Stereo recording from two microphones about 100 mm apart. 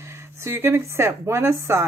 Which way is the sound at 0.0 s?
25° right (ahead or behind).